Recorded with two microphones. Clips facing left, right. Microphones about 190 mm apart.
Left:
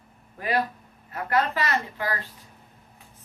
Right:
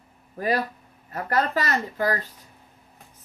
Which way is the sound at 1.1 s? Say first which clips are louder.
Right 1 dB; 40° right (ahead or behind).